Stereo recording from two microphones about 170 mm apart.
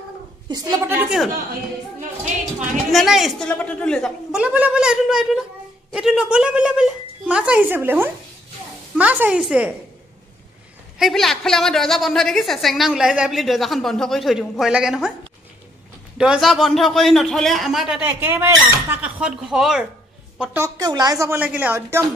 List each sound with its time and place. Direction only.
0.5 s a woman's voice: 25° right (ahead or behind)
0.9 s a woman's voice: 5° right (ahead or behind)
2.9 s a woman's voice: centre (ahead or behind)
11.0 s a woman's voice: centre (ahead or behind)
16.2 s a woman's voice: centre (ahead or behind)
20.6 s a woman's voice: 20° right (ahead or behind)